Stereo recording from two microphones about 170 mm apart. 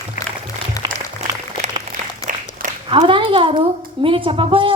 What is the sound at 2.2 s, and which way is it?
Applause, 35° right (ahead or behind).